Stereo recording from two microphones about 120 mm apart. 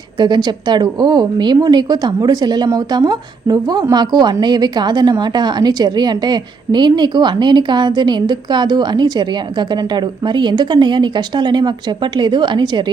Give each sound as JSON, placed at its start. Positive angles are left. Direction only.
{"t": 0.2, "sound": "a woman's voice", "side_deg": -35}